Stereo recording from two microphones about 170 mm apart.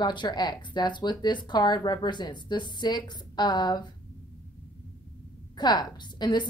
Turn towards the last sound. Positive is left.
turn(degrees=25)  # may be behind; listen again after turning